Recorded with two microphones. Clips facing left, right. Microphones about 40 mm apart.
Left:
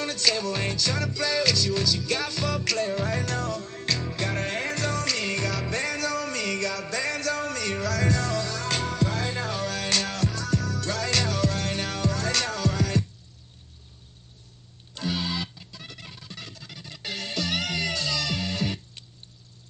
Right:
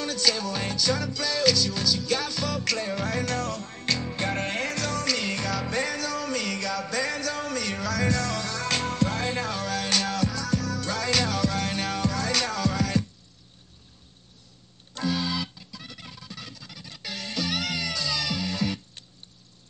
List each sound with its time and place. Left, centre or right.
0.0 s music: centre
2.6 s music: centre
3.3 s music: centre
3.8 s music: right
4.6 s music: centre
4.9 s music: centre
15.0 s music: centre